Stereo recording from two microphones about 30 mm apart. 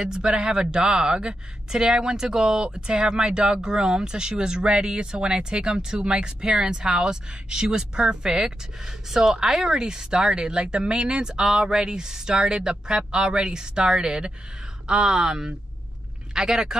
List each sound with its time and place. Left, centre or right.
0.0 s speech: right
9.7 s speech: right